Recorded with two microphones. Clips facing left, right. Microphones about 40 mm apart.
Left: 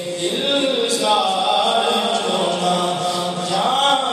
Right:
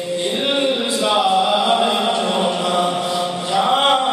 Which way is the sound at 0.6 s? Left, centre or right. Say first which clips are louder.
Even; centre.